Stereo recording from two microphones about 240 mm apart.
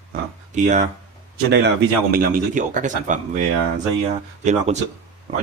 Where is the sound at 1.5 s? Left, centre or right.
Right.